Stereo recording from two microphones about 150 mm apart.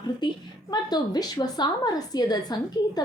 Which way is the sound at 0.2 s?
30° left (ahead or behind).